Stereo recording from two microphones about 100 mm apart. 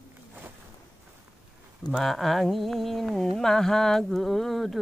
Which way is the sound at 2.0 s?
Centre (ahead or behind).